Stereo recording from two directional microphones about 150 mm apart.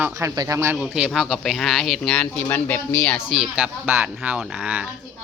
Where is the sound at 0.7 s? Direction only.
5° right (ahead or behind).